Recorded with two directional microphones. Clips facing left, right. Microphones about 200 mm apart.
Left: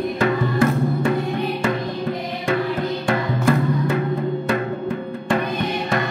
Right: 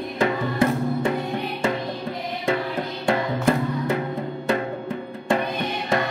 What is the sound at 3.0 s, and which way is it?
Music, 25° right (ahead or behind).